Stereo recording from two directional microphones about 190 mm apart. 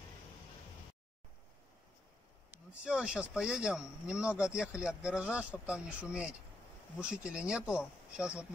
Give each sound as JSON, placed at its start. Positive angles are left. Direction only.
{"t": 2.5, "sound": "speech", "side_deg": -5}